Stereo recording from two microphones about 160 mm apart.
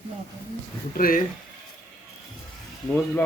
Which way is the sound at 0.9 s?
60° left (ahead or behind).